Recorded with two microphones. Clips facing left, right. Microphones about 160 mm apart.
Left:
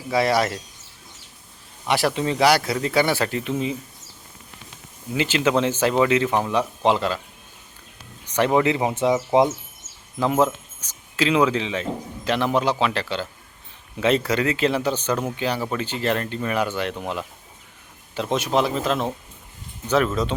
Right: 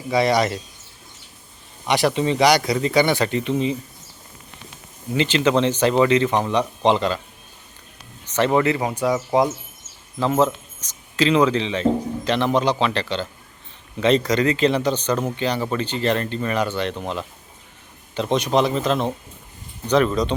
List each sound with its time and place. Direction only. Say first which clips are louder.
0.1 s speech: right 2 dB; 5° left (ahead or behind)
1.9 s speech: right 2 dB; centre (ahead or behind)
5.1 s speech: right 2 dB; 5° left (ahead or behind)
8.2 s speech: right 1 dB; 10° left (ahead or behind)
10.2 s speech: right 1 dB; 10° left (ahead or behind)